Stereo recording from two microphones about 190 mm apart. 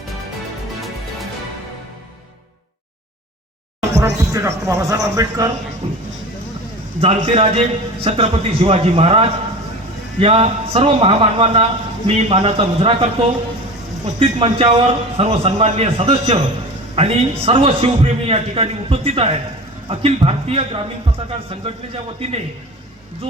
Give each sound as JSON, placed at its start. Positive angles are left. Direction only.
{"t": 3.9, "sound": "speech", "side_deg": -15}
{"t": 7.0, "sound": "a man's voice", "side_deg": -30}